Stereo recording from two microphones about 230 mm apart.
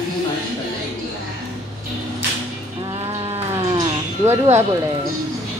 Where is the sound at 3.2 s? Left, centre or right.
Right.